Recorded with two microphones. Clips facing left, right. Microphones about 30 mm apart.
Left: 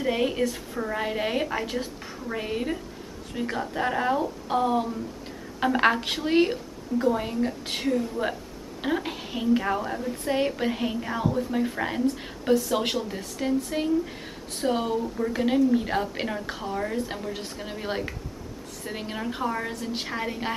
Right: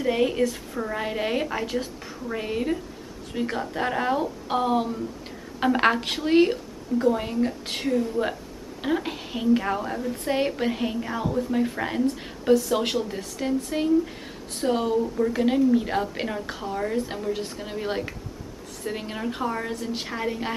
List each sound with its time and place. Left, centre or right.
0.0 s a woman's voice: centre
5.6 s a woman's voice: centre
10.2 s a woman's voice: centre